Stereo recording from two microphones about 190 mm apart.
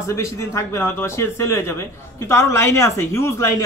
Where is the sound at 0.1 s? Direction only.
15° left (ahead or behind).